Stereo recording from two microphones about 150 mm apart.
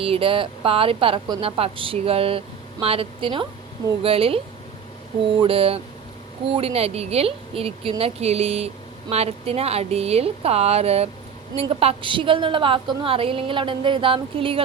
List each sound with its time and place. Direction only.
0.0 s a woman's voice: 35° right (ahead or behind)
5.4 s a woman's voice: 40° right (ahead or behind)